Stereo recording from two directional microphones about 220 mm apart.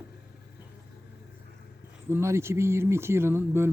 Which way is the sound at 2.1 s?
10° right (ahead or behind).